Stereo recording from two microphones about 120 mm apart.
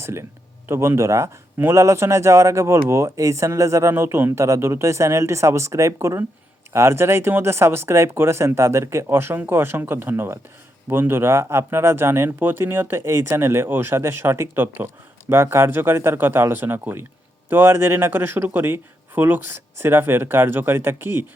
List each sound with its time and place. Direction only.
0.0 s speech: 20° right (ahead or behind)